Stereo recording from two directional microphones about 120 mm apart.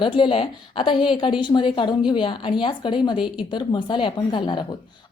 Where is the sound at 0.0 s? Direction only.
45° left (ahead or behind).